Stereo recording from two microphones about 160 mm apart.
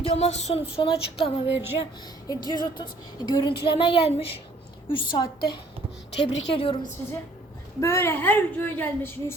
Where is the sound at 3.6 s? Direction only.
35° left (ahead or behind).